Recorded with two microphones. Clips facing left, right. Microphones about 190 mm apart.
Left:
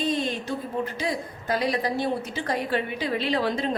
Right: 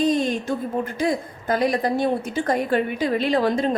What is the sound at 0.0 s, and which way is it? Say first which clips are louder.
A woman's voice: right 6 dB; 45° right (ahead or behind).